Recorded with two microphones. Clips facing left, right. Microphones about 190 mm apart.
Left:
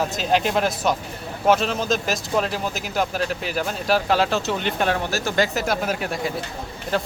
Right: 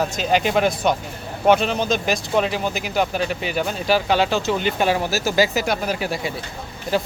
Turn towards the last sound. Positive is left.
turn(degrees=-5)  # may be behind; listen again after turning